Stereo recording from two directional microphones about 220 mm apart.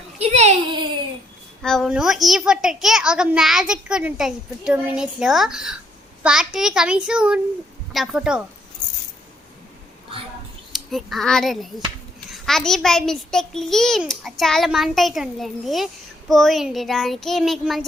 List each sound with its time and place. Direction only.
0.2 s a sound: 30° right (ahead or behind)
1.6 s a child's voice: centre (ahead or behind)
10.7 s a child's voice: centre (ahead or behind)